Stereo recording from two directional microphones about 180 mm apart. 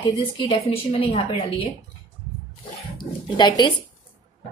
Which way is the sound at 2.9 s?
25° left (ahead or behind).